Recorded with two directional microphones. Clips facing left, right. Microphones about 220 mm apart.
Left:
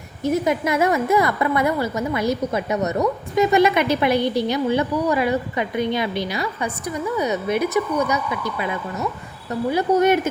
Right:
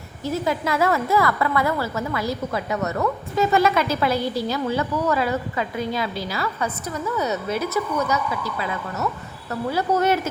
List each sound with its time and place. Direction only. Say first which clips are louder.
0.2 s a woman's voice: left 4 dB; 20° left (ahead or behind)